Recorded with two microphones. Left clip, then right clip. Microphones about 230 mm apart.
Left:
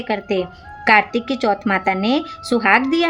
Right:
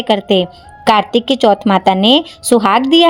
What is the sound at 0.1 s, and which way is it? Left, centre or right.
A woman's voice, right.